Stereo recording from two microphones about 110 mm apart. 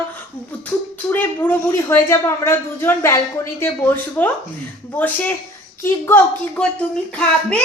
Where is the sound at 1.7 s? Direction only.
25° left (ahead or behind).